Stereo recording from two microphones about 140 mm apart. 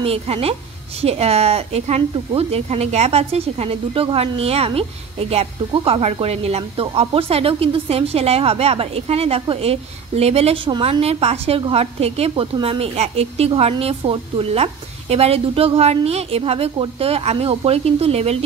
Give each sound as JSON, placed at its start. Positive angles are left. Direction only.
{"t": 0.0, "sound": "speech", "side_deg": -45}